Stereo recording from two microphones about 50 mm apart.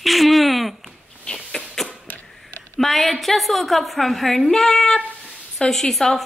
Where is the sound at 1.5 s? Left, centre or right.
Centre.